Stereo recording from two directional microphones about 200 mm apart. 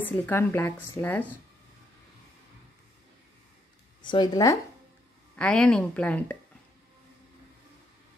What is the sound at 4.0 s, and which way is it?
Speech, 20° left (ahead or behind).